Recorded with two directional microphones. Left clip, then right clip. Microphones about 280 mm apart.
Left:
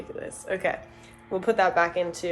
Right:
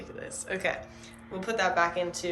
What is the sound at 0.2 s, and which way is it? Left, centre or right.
A woman's voice, centre.